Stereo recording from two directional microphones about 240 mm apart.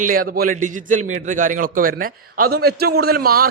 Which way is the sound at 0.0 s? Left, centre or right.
Right.